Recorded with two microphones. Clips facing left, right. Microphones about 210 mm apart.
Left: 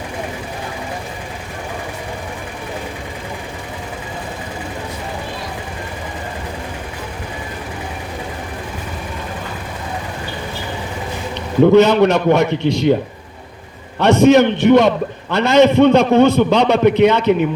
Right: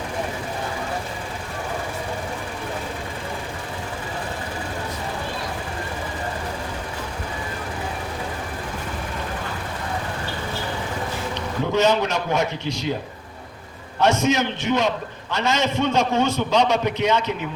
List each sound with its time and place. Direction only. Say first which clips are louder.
11.6 s a man's voice: left 10 dB; 65° left (ahead or behind)
14.0 s a man's voice: left 9 dB; 65° left (ahead or behind)